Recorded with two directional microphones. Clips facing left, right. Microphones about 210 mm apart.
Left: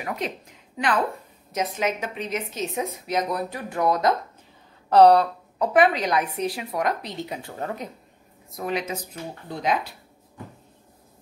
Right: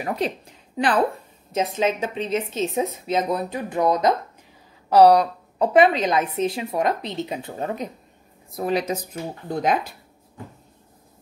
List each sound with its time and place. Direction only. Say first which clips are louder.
0.0 s speech: right 5 dB; 35° right (ahead or behind)
4.8 s speech: right 1 dB; 10° right (ahead or behind)
5.6 s speech: right 3 dB; 25° right (ahead or behind)
8.5 s speech: right 5 dB; 35° right (ahead or behind)
9.5 s speech: right 3 dB; 50° right (ahead or behind)